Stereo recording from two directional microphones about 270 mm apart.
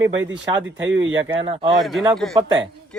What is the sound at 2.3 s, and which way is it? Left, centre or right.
Speech, centre.